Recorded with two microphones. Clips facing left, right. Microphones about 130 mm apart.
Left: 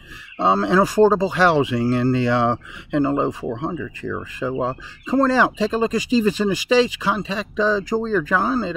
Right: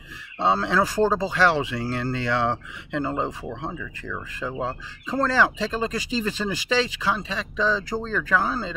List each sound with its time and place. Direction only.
0.4 s speech: 15° left (ahead or behind)